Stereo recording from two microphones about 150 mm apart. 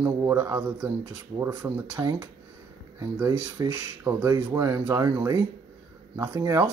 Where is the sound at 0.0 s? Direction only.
20° right (ahead or behind).